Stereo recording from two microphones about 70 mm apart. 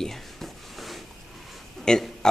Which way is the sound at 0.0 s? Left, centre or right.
Centre.